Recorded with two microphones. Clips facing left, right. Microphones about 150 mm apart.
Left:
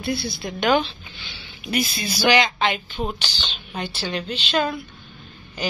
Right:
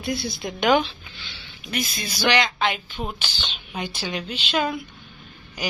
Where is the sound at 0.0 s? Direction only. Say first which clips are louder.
Left 1 dB; 15° right (ahead or behind).